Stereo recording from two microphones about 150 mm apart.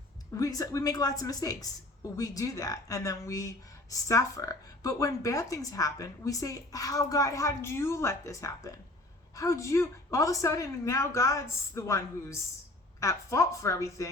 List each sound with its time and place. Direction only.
0.3 s speech: 25° left (ahead or behind)